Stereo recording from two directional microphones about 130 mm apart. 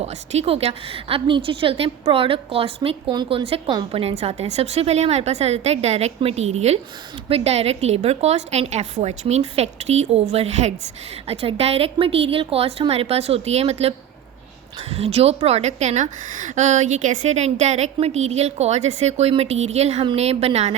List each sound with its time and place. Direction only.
0.0 s a woman's voice: 55° right (ahead or behind)